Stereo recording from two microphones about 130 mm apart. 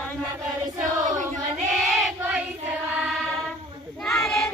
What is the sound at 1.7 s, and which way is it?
Child singing, centre (ahead or behind).